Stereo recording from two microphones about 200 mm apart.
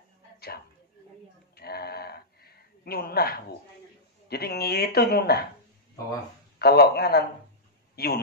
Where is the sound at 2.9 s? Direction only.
50° left (ahead or behind).